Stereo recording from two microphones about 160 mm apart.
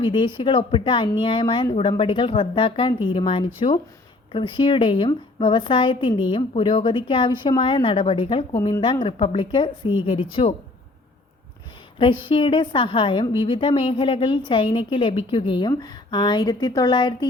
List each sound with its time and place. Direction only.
0.0 s a woman's voice: 30° left (ahead or behind)
11.9 s a woman's voice: 30° left (ahead or behind)